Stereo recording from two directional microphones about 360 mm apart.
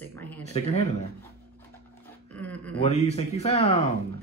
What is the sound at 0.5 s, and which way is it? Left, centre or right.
Speech, centre.